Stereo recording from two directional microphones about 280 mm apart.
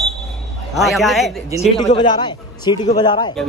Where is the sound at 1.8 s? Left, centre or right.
Centre.